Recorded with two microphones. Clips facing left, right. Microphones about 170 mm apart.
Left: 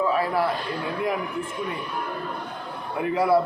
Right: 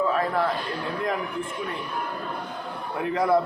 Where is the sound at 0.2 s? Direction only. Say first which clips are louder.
Left 1 dB; 10° left (ahead or behind).